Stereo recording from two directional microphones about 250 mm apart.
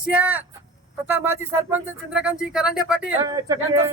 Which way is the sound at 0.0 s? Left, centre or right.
Centre.